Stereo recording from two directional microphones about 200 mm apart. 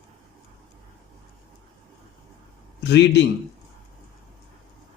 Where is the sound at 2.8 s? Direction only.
60° left (ahead or behind).